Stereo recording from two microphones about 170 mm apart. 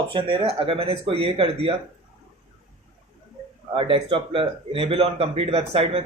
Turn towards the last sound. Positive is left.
turn(degrees=-35)  # may be behind; listen again after turning